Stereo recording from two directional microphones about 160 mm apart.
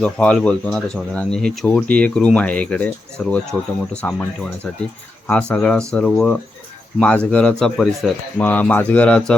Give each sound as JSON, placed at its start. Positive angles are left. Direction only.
{"t": 0.0, "sound": "speech", "side_deg": 5}
{"t": 5.3, "sound": "speech", "side_deg": 5}